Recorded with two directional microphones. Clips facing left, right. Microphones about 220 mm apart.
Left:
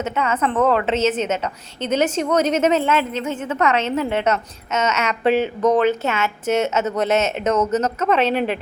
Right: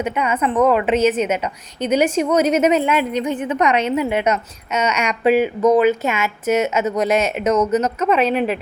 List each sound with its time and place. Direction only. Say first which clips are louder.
0.0 s a woman's voice: right 1 dB; 15° right (ahead or behind)